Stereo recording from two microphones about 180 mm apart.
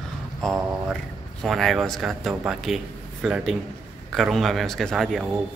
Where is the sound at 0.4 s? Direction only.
Centre (ahead or behind).